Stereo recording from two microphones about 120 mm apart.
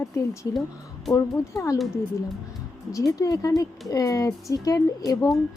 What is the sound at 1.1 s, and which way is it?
Speech, 25° left (ahead or behind).